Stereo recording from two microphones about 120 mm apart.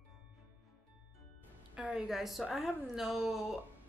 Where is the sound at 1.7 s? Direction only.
5° right (ahead or behind).